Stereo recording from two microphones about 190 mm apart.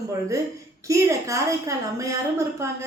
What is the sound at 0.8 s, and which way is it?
Speech, 15° right (ahead or behind).